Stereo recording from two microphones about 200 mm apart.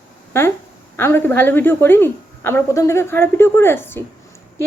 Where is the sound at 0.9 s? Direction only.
10° left (ahead or behind).